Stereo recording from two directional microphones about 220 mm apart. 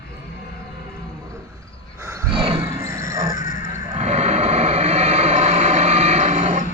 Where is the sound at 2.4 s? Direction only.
25° right (ahead or behind).